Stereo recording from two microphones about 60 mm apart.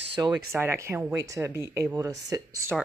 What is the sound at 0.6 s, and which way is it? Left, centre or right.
Speech, right.